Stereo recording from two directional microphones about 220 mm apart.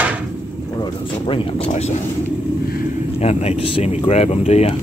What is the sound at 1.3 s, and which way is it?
Speech, 30° left (ahead or behind).